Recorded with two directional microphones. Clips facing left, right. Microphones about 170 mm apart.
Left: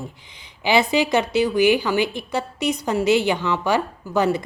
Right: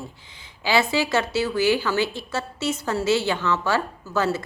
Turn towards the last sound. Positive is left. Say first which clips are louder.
# left 4 dB
turn(degrees=15)  # may be behind; listen again after turning